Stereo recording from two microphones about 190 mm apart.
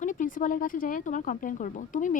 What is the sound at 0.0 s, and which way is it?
Speech, 45° left (ahead or behind).